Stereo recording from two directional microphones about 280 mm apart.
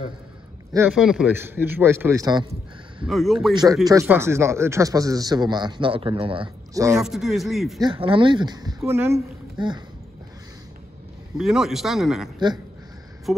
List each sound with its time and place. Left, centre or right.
0.7 s speech: centre
3.1 s speech: centre
3.8 s speech: centre
7.8 s speech: centre
11.3 s speech: centre